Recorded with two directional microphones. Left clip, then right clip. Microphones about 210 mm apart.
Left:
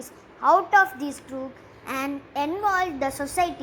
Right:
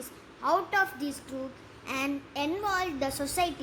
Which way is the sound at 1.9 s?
5° left (ahead or behind).